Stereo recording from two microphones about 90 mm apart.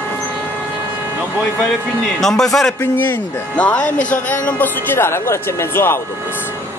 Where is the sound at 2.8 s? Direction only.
25° left (ahead or behind).